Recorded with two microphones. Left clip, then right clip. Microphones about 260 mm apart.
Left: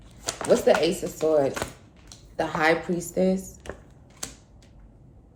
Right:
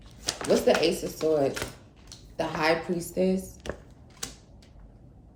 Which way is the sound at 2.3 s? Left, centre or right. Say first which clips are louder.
Left 3 dB; left.